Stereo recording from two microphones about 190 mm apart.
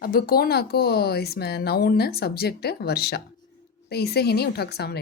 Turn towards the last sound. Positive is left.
turn(degrees=55)  # may be behind; listen again after turning